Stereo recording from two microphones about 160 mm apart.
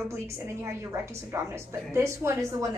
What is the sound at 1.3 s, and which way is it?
Speech, 15° right (ahead or behind).